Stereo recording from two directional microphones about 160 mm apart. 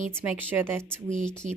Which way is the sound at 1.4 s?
50° right (ahead or behind).